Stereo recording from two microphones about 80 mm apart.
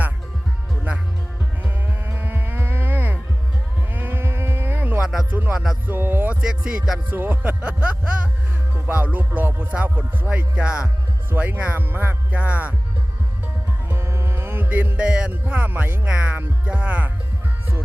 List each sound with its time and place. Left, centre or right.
1.6 s music: right
3.9 s sheep: right
4.9 s music: centre
5.3 s music: right
5.9 s a sound: right
6.7 s music: centre
7.1 s music: right
13.8 s music: right; by 17.1 s centre